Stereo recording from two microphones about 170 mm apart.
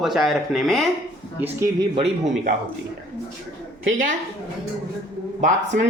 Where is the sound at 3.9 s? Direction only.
50° right (ahead or behind).